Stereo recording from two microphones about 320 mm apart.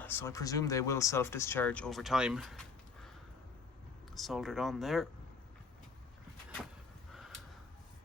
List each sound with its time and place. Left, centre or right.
0.0 s speech: centre
4.1 s speech: centre
7.1 s a sound: centre